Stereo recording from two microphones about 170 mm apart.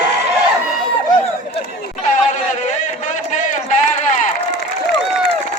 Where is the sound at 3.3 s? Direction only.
45° left (ahead or behind).